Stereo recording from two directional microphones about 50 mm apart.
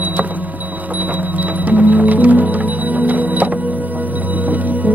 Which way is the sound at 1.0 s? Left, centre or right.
Right.